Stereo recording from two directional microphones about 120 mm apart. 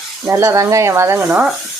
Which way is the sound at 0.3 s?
25° right (ahead or behind).